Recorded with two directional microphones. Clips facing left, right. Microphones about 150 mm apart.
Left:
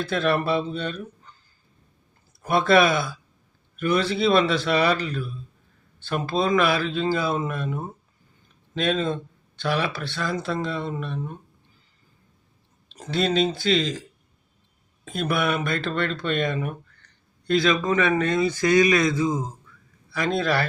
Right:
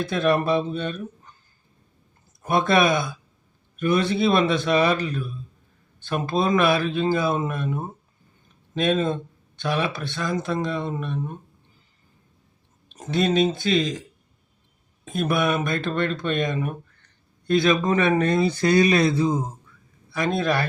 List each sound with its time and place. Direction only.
0.0 s speech: 20° right (ahead or behind)
2.4 s speech: 20° right (ahead or behind)
13.0 s speech: 20° right (ahead or behind)
15.2 s a man's voice: 20° right (ahead or behind)